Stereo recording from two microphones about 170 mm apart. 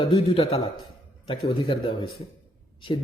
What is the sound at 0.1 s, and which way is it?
A man's voice, 35° left (ahead or behind).